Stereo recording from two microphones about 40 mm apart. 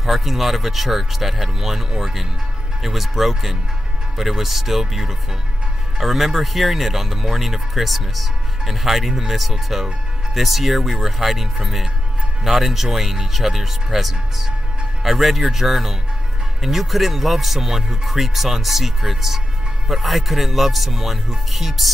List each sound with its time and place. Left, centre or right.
0.0 s speech: centre
2.8 s speech: centre